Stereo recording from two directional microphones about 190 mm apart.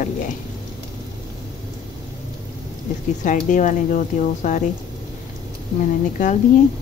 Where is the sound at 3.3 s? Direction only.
40° left (ahead or behind).